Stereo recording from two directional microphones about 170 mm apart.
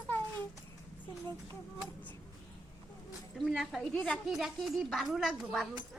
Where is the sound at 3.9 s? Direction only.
10° left (ahead or behind).